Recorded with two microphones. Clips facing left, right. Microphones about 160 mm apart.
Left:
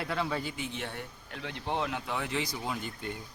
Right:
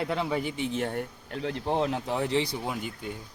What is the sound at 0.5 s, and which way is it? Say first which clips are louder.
Speech: right 8 dB; 30° right (ahead or behind).